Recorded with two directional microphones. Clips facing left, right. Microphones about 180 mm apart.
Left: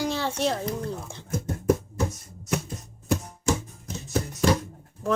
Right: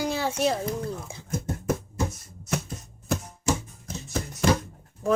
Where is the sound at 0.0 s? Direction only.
10° right (ahead or behind).